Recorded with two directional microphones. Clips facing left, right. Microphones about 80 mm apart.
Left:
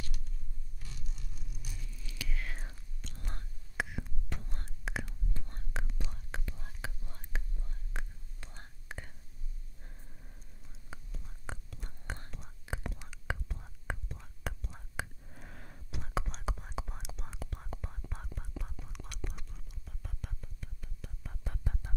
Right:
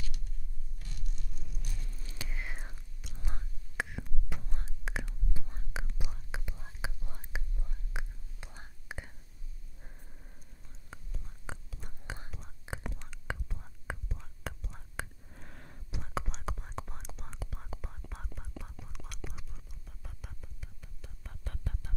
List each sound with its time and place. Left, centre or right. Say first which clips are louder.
1.1 s vehicle: right 1 dB; centre
1.9 s whispering: left 2 dB; right; by 2.7 s centre
2.7 s whispering: left 1 dB; centre
21.5 s whispering: left 1 dB; centre